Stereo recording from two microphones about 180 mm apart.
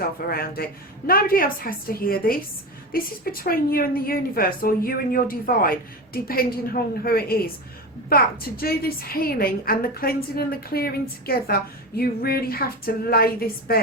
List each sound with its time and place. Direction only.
0.3 s a woman's voice: 55° left (ahead or behind)